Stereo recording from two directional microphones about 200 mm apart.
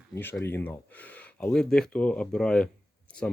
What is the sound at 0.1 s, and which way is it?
Speech, 10° left (ahead or behind).